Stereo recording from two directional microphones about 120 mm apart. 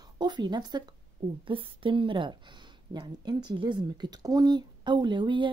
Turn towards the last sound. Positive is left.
turn(degrees=-40)  # may be behind; listen again after turning